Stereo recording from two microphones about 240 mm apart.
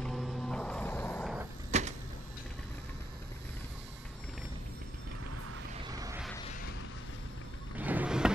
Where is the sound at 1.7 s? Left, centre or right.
Right.